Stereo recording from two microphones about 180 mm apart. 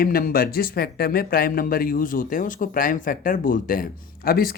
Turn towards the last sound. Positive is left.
turn(degrees=55)  # may be behind; listen again after turning